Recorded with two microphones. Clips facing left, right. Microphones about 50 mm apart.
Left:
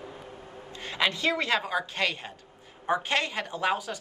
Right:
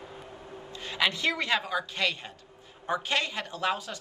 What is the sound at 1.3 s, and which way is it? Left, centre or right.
A woman's voice, centre.